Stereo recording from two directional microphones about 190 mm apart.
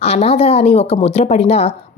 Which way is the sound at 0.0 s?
35° left (ahead or behind).